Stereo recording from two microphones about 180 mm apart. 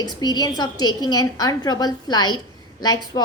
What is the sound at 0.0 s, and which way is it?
A woman's voice, 20° left (ahead or behind).